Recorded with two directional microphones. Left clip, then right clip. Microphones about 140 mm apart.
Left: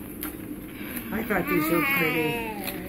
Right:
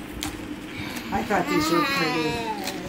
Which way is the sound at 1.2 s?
15° right (ahead or behind).